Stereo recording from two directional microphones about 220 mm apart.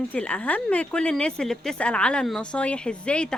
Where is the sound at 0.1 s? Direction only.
5° left (ahead or behind).